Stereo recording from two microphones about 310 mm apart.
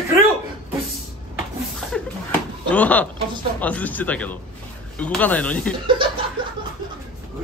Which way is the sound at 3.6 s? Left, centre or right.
Centre.